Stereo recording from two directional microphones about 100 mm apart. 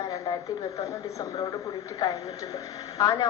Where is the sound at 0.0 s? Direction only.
35° left (ahead or behind).